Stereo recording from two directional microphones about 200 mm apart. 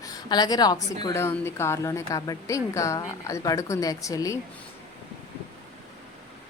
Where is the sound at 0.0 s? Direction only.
20° left (ahead or behind).